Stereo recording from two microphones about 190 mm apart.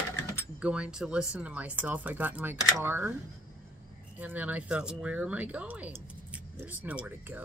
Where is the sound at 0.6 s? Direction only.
5° right (ahead or behind).